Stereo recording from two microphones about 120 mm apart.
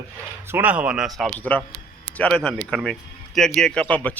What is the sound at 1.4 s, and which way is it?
Speech, 15° left (ahead or behind).